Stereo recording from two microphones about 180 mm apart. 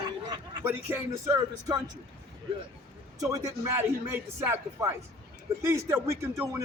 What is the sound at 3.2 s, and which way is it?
Speech, 20° right (ahead or behind).